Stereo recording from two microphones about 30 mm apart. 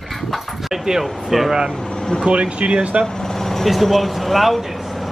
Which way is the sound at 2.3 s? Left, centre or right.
Right.